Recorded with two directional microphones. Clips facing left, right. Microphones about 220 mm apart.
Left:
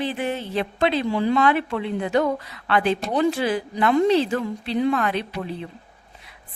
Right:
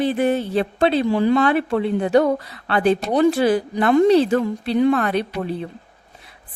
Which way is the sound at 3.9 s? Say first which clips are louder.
Right 5 dB; 50° right (ahead or behind).